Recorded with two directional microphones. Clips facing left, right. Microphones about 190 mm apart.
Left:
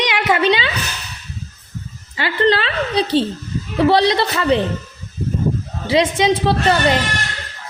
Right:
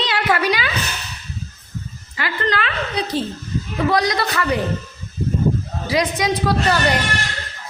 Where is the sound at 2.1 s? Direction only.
30° left (ahead or behind).